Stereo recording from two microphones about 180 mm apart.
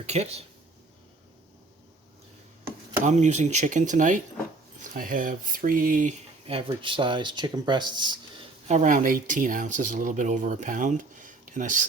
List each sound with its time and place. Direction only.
0.0 s speech: 35° right (ahead or behind)
3.0 s speech: 40° right (ahead or behind)
6.5 s speech: 30° right (ahead or behind)
8.6 s speech: 40° right (ahead or behind)